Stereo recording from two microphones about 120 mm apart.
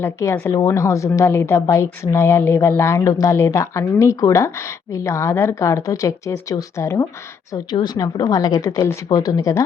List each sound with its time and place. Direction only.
0.0 s a woman's voice: 25° left (ahead or behind)